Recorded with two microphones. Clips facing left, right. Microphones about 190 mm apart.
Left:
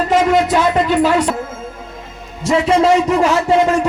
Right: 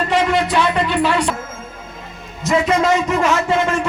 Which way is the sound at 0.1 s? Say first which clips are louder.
Left 5 dB; 45° left (ahead or behind).